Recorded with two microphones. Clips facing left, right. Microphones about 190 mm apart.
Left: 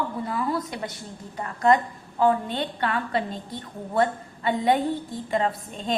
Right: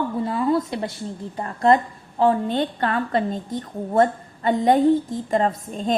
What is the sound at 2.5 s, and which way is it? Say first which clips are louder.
A woman's voice: right 5 dB; 40° right (ahead or behind).